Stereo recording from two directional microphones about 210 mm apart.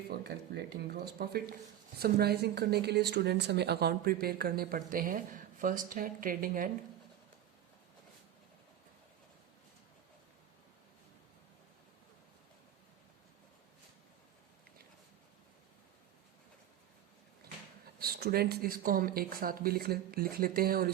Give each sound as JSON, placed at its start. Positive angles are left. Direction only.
{"t": 0.3, "sound": "speech", "side_deg": -50}
{"t": 18.0, "sound": "speech", "side_deg": -45}